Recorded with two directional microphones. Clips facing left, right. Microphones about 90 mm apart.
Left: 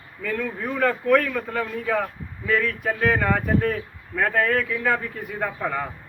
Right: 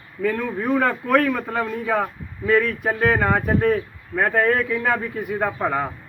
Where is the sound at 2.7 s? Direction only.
20° right (ahead or behind).